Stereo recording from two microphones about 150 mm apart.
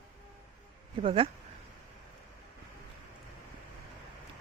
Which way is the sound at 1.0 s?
35° right (ahead or behind).